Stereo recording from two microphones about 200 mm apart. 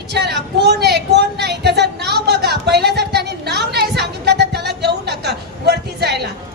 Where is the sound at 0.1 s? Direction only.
55° right (ahead or behind).